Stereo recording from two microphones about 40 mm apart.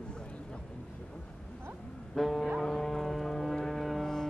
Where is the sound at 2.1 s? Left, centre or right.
Centre.